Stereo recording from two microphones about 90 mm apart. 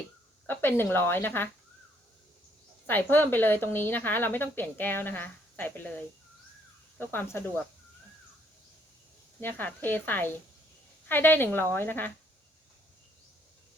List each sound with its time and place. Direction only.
0.4 s a woman's voice: 25° left (ahead or behind)
2.8 s a woman's voice: 20° left (ahead or behind)
7.0 s a woman's voice: 20° left (ahead or behind)
9.4 s a woman's voice: 20° left (ahead or behind)